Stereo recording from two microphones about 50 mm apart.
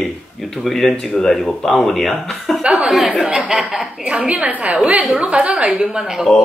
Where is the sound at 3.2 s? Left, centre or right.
Right.